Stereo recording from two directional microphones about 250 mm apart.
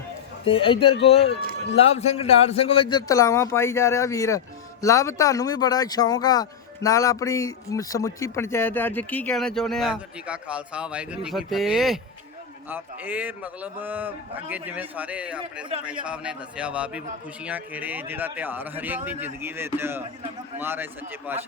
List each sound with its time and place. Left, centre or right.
0.4 s a man's voice: left; by 21.4 s centre